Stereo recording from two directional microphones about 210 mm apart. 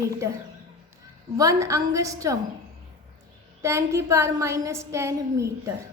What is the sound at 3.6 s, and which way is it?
A woman's voice, 15° right (ahead or behind).